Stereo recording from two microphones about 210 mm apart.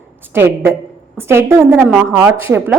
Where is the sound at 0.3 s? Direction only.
10° right (ahead or behind).